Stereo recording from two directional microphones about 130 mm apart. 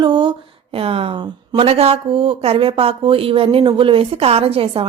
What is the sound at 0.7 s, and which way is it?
Speech, 45° right (ahead or behind).